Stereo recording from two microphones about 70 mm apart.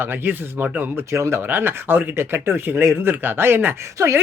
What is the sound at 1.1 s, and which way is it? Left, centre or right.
Speech, right.